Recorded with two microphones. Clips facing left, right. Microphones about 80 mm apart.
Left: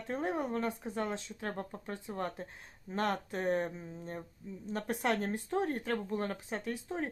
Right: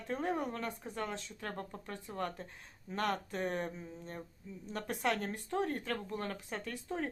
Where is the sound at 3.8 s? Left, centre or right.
Centre.